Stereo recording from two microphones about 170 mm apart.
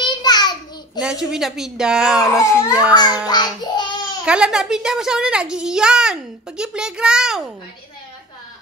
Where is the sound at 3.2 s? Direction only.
25° left (ahead or behind).